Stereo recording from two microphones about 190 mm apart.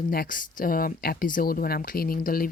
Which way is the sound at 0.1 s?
50° left (ahead or behind).